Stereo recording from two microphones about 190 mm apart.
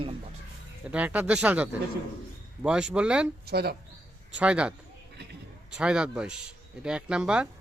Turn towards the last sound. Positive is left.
turn(degrees=-5)  # may be behind; listen again after turning